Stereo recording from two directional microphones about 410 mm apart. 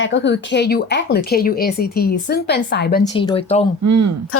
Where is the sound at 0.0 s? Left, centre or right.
Left.